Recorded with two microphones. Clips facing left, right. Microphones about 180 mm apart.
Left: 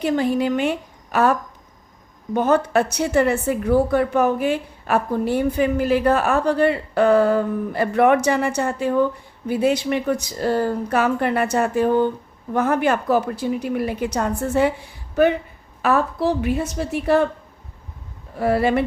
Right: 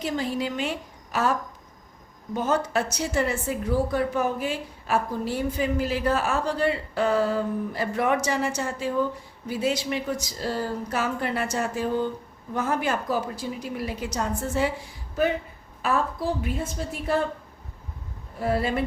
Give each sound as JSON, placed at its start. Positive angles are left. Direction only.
{"t": 0.0, "sound": "a woman's voice", "side_deg": 60}
{"t": 18.3, "sound": "a woman's voice", "side_deg": 70}